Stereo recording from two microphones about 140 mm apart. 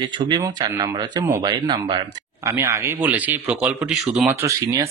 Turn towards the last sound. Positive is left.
turn(degrees=-20)  # may be behind; listen again after turning